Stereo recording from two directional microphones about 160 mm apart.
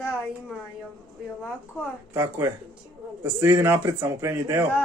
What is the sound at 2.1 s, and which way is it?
Speech, 20° right (ahead or behind).